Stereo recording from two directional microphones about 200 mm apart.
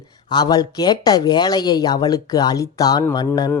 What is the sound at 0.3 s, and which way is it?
Speech, 20° left (ahead or behind).